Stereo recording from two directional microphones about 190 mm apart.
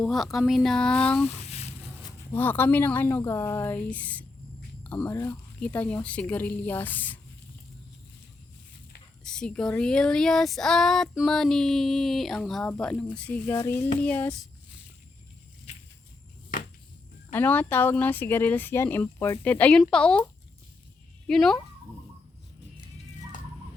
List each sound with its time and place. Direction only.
0.0 s speech: centre (ahead or behind)
1.3 s a sound: 35° left (ahead or behind)
2.0 s speech: 10° left (ahead or behind)
9.2 s speech: 5° left (ahead or behind)
17.3 s speech: 10° left (ahead or behind)
21.2 s speech: 5° left (ahead or behind)